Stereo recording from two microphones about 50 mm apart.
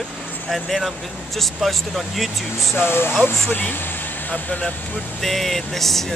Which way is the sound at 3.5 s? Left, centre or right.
Left.